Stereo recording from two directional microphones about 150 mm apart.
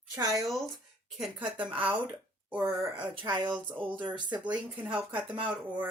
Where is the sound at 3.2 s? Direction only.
30° right (ahead or behind).